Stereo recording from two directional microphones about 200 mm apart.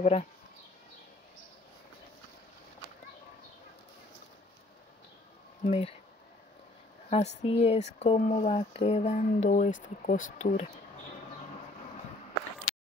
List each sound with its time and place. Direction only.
0.0 s speech: 35° left (ahead or behind)
5.6 s speech: 30° left (ahead or behind)
7.1 s speech: 35° left (ahead or behind)